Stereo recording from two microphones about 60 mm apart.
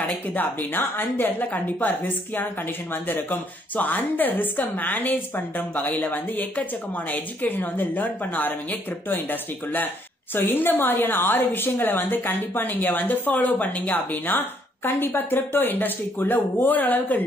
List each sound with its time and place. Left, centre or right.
0.0 s a woman's voice: left